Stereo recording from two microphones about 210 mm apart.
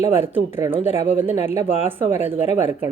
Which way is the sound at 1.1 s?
35° left (ahead or behind).